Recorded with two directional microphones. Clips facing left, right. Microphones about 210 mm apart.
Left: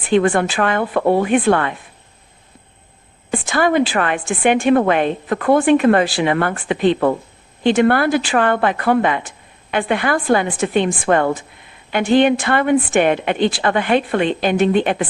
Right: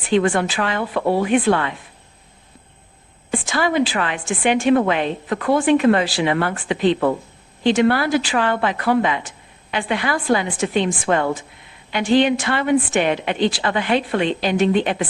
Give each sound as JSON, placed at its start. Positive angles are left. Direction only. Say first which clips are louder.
{"t": 0.1, "sound": "a woman's voice", "louder": "left 3 dB", "side_deg": 55}
{"t": 3.3, "sound": "a woman's voice", "louder": "left 3 dB", "side_deg": 55}